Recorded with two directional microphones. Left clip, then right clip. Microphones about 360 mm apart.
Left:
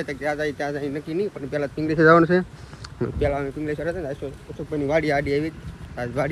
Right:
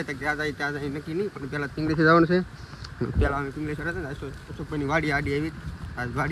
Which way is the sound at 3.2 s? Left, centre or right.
Centre.